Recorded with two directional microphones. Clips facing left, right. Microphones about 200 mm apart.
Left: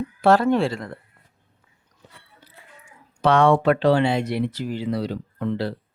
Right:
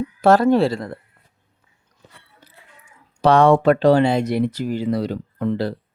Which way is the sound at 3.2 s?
35° right (ahead or behind).